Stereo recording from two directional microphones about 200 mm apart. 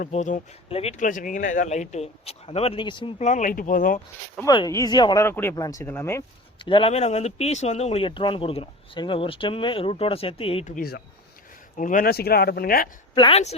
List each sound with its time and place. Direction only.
0.0 s speech: 35° left (ahead or behind)
4.5 s speech: 20° left (ahead or behind)
6.7 s speech: 25° left (ahead or behind)
10.8 s speech: 50° left (ahead or behind)
13.1 s speech: 25° left (ahead or behind)